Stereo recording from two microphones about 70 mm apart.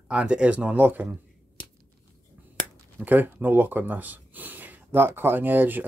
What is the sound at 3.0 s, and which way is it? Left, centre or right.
Speech, right.